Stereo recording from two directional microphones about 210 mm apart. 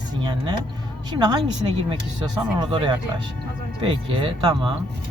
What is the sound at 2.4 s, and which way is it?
Speech, 20° right (ahead or behind).